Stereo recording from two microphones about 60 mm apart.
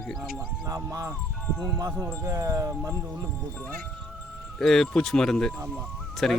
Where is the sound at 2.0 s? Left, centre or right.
Right.